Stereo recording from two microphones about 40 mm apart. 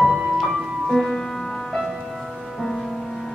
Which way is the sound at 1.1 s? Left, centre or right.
Centre.